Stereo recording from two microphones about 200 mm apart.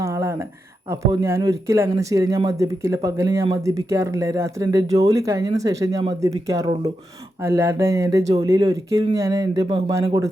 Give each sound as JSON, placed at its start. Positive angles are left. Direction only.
{"t": 0.0, "sound": "a sound", "side_deg": -15}
{"t": 0.9, "sound": "speech", "side_deg": -15}
{"t": 7.4, "sound": "speech", "side_deg": -15}